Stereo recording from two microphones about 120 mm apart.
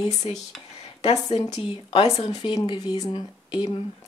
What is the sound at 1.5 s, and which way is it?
Speech, 55° left (ahead or behind).